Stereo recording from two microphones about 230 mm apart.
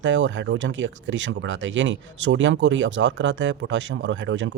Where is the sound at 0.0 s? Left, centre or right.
Right.